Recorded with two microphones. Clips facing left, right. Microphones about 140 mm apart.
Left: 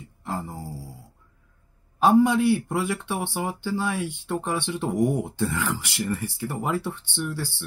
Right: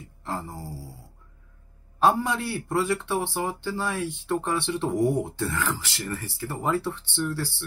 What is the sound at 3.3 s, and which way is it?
Speech, 10° left (ahead or behind).